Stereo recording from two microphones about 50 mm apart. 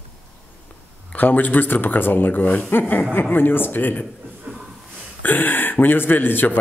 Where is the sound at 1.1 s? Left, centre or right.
Left.